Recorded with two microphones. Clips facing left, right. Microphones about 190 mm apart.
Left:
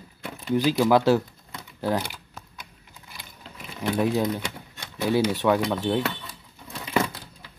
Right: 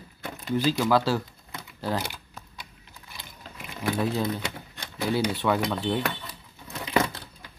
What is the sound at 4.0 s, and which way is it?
Speech, 15° left (ahead or behind).